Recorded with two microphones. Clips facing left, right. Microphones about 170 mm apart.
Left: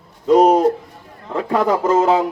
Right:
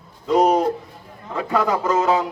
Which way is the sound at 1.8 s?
30° left (ahead or behind).